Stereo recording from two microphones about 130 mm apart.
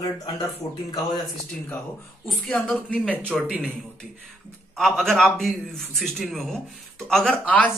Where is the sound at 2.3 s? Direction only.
5° left (ahead or behind).